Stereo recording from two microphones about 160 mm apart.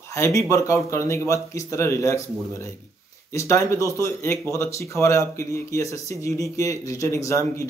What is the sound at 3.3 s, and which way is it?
A man's voice, 20° left (ahead or behind).